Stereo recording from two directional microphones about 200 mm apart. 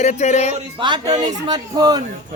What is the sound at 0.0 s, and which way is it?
Music, 35° left (ahead or behind).